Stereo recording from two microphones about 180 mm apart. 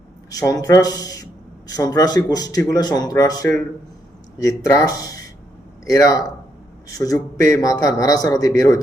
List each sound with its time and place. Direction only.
0.3 s a man's voice: 20° left (ahead or behind)